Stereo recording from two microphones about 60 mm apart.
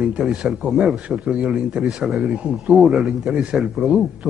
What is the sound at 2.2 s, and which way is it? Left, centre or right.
Speech, centre.